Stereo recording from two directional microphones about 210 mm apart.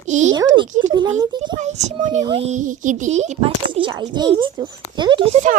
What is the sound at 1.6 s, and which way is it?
Speech, 35° right (ahead or behind).